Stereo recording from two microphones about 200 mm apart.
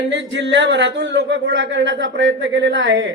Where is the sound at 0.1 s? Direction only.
65° right (ahead or behind).